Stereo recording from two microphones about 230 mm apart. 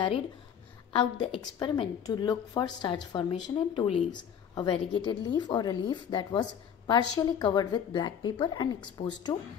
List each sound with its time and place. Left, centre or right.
0.9 s a woman's voice: left